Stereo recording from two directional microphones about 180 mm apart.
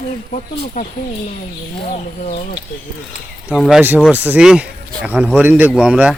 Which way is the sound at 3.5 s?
5° right (ahead or behind).